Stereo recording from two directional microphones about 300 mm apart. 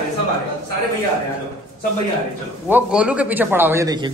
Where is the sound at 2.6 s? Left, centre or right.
Centre.